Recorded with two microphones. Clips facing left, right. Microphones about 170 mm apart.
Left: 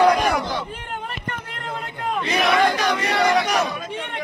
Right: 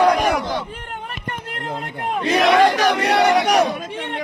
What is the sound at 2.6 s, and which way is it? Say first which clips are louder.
Speech: right 4 dB; 75° right (ahead or behind).